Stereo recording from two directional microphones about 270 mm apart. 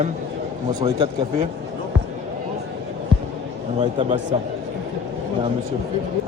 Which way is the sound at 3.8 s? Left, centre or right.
Centre.